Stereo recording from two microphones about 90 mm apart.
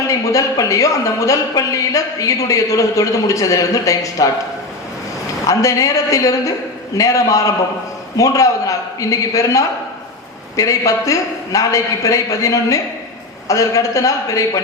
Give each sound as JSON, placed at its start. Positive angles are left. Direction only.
{"t": 0.1, "sound": "a man's voice", "side_deg": 40}
{"t": 5.5, "sound": "a man's voice", "side_deg": 40}